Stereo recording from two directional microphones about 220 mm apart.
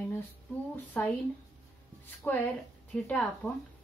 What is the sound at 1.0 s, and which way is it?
A woman's voice, 5° left (ahead or behind).